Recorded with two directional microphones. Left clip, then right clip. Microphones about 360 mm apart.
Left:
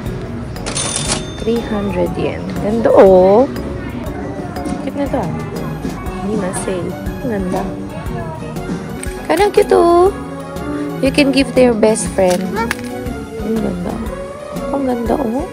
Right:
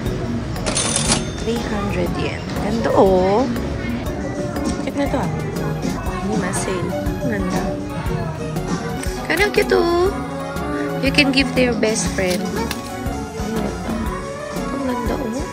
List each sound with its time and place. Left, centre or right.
0.7 s cash register: centre
2.8 s speech: centre
4.9 s speech: centre
9.3 s speech: centre